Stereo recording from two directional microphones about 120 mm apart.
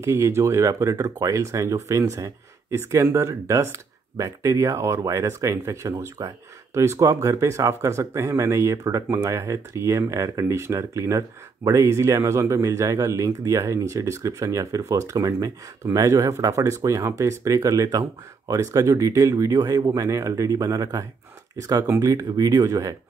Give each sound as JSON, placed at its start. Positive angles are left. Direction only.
{"t": 0.0, "sound": "speech", "side_deg": -25}